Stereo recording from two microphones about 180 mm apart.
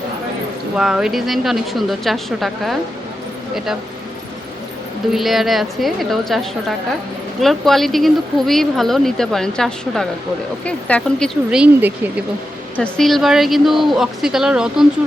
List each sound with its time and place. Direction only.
0.8 s speech: 5° right (ahead or behind)
5.1 s speech: centre (ahead or behind)
11.5 s speech: 10° right (ahead or behind)
12.7 s speech: 5° left (ahead or behind)